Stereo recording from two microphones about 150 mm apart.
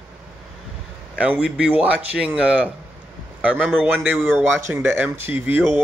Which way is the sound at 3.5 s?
5° left (ahead or behind).